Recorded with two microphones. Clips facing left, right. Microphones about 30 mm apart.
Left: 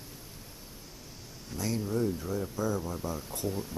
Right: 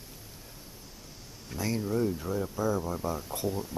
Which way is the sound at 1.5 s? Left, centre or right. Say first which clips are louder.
Right 2 dB; centre.